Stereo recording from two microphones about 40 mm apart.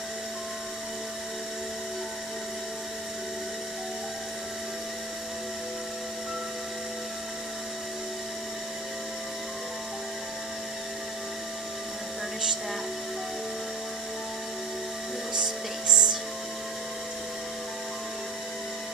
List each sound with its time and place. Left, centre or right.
15.3 s music: centre